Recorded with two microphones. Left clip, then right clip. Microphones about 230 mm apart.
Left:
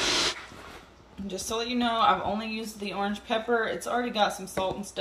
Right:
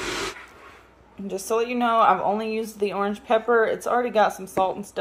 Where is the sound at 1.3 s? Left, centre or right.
Centre.